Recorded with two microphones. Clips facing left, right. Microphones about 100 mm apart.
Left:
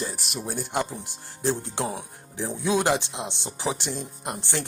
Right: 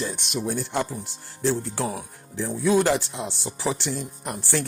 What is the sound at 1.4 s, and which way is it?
Speech, 20° left (ahead or behind).